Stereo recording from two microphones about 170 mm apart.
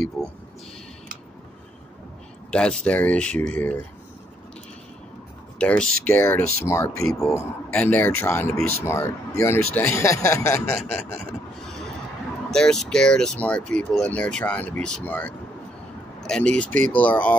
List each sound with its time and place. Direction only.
2.5 s speech: 5° left (ahead or behind)
5.6 s speech: 5° left (ahead or behind)
12.4 s speech: 5° left (ahead or behind)